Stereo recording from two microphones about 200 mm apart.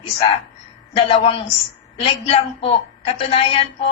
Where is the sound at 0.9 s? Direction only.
30° left (ahead or behind).